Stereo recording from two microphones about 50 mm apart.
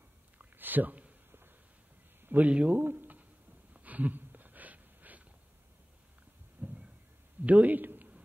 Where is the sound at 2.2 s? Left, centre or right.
Right.